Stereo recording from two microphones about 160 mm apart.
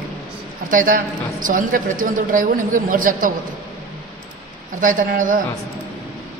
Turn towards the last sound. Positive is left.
turn(degrees=-55)  # may be behind; listen again after turning